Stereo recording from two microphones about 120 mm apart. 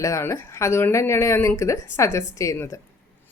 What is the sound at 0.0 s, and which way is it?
A woman's voice, 25° left (ahead or behind).